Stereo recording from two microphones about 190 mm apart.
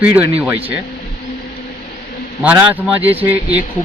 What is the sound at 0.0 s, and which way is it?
Speech, 10° right (ahead or behind).